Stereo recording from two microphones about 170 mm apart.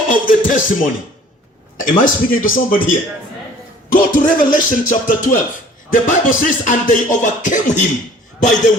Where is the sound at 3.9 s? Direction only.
55° left (ahead or behind).